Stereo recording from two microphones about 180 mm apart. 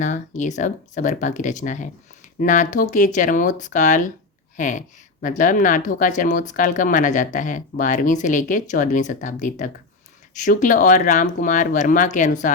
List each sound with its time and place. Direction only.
0.0 s speech: 45° left (ahead or behind)